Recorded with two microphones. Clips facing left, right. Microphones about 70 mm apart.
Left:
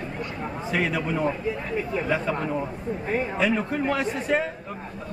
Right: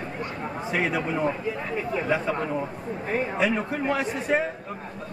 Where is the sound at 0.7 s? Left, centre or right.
Centre.